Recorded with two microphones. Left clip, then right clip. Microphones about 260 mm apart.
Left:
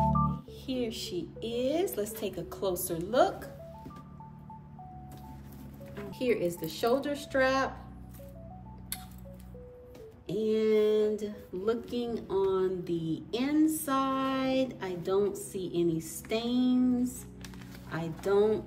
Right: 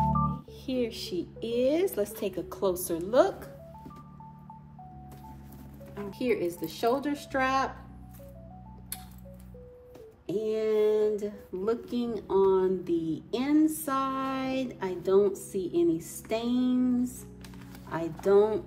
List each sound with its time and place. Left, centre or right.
0.3 s music: right
6.0 s music: right
10.2 s music: right
17.8 s speech: right
18.2 s music: right